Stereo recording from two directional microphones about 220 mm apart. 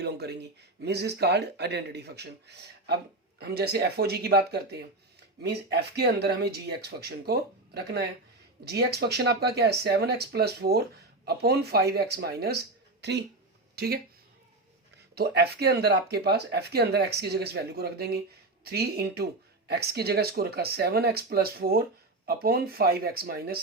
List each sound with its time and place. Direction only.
0.0 s a sound: 50° right (ahead or behind)
0.8 s a woman's voice: 50° right (ahead or behind)
15.1 s speech: 45° right (ahead or behind)